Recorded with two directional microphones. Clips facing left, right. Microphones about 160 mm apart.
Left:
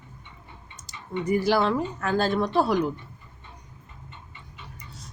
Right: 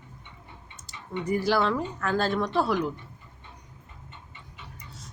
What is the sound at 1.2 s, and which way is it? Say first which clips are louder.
A woman's voice: left 2 dB; 15° left (ahead or behind).